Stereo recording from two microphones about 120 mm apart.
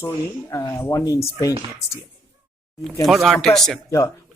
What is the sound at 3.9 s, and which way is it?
Speech, 30° left (ahead or behind).